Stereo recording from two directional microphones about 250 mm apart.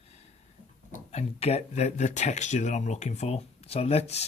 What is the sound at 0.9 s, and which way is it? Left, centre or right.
Speech, left.